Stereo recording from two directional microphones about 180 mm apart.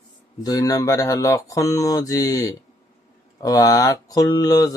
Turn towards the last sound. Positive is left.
turn(degrees=20)  # may be behind; listen again after turning